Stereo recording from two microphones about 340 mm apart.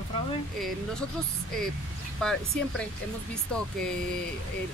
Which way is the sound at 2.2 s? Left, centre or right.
Centre.